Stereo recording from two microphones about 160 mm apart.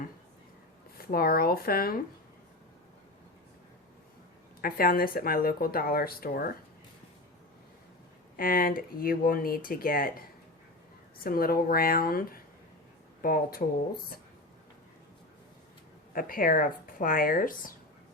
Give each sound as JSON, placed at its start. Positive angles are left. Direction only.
{"t": 0.9, "sound": "speech", "side_deg": 70}
{"t": 4.6, "sound": "speech", "side_deg": 65}
{"t": 8.4, "sound": "speech", "side_deg": 65}
{"t": 16.1, "sound": "speech", "side_deg": 60}